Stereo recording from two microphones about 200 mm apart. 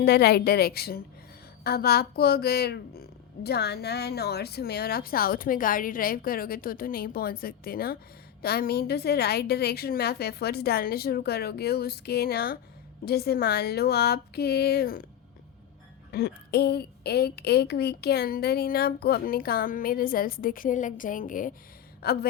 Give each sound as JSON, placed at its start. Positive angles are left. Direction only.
{"t": 0.0, "sound": "speech", "side_deg": 55}
{"t": 16.1, "sound": "a woman's voice", "side_deg": 55}